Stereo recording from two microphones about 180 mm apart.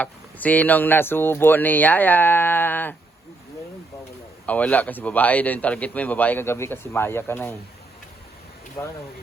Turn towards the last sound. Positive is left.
turn(degrees=15)  # may be behind; listen again after turning